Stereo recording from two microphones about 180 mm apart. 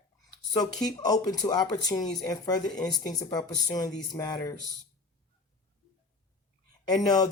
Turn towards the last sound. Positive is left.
turn(degrees=20)  # may be behind; listen again after turning